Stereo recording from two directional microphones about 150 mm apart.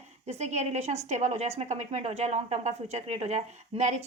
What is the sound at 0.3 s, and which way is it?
A woman's voice, 50° right (ahead or behind).